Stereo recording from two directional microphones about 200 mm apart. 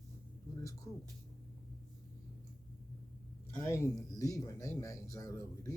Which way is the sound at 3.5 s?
15° left (ahead or behind).